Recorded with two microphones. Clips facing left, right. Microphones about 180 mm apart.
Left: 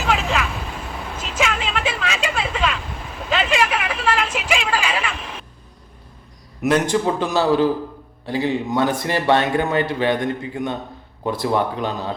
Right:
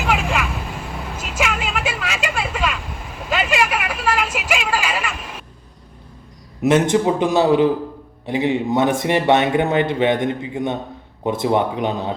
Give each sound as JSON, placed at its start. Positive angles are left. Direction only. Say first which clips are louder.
{"t": 0.0, "sound": "vehicle", "louder": "even", "side_deg": -5}
{"t": 3.2, "sound": "a sound", "louder": "even", "side_deg": -5}
{"t": 6.7, "sound": "a man's voice", "louder": "right 3 dB", "side_deg": -25}